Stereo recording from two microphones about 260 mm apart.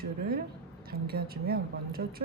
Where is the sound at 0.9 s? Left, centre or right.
Right.